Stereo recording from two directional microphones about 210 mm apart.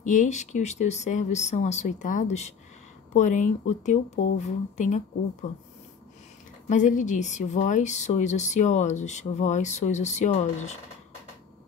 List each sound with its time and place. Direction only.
0.0 s speech: 35° left (ahead or behind)
6.7 s speech: 35° left (ahead or behind)